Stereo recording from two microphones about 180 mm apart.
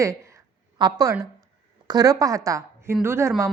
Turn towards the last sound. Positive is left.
turn(degrees=-15)  # may be behind; listen again after turning